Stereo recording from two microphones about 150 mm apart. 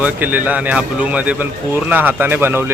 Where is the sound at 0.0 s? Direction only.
10° right (ahead or behind).